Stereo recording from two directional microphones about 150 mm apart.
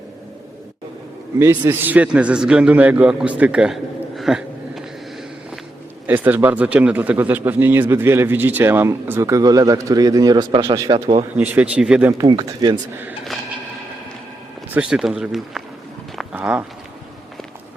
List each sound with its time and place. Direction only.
1.4 s a man's voice: 15° right (ahead or behind)
4.2 s a sound: centre (ahead or behind)
6.1 s a man's voice: 10° right (ahead or behind); by 10.8 s 30° right (ahead or behind)
11.3 s a man's voice: 10° right (ahead or behind)
12.1 s speech: 30° right (ahead or behind)
14.7 s a man's voice: 5° right (ahead or behind)